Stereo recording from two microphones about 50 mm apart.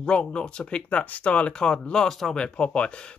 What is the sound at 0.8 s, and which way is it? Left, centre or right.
Speech, left.